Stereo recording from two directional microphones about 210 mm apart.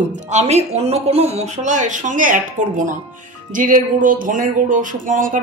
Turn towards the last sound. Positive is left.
turn(degrees=-40)  # may be behind; listen again after turning